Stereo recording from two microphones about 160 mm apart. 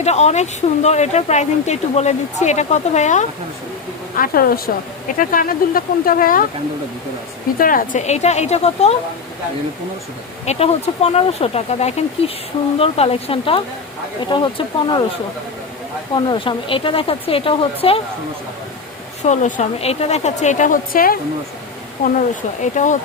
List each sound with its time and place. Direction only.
0.0 s speech: 45° left (ahead or behind)
4.1 s speech: 60° left (ahead or behind)
7.6 s speech: 60° left (ahead or behind); by 9.0 s 40° left (ahead or behind)
10.4 s speech: 40° left (ahead or behind)
16.1 s speech: 30° left (ahead or behind)
19.2 s speech: 45° left (ahead or behind); by 21.2 s 65° left (ahead or behind)
22.6 s speech: 50° left (ahead or behind)